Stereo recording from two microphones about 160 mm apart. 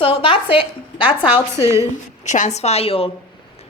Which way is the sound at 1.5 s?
15° right (ahead or behind).